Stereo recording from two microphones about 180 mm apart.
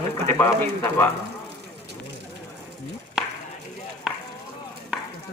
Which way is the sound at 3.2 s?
5° right (ahead or behind).